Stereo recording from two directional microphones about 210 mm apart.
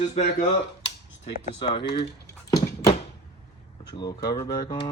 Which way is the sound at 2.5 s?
20° left (ahead or behind).